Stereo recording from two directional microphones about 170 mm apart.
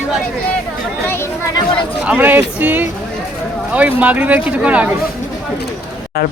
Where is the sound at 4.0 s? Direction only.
10° right (ahead or behind).